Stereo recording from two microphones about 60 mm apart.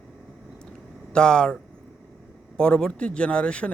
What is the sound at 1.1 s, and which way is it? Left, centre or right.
Speech, centre.